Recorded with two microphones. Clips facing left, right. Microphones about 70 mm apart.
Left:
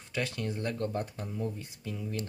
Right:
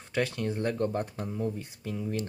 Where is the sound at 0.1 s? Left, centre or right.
Right.